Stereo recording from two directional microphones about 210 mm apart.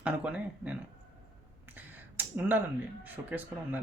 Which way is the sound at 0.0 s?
5° right (ahead or behind).